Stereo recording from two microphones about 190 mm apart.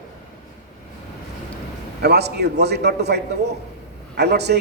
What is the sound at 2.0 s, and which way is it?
A man's voice, 60° right (ahead or behind).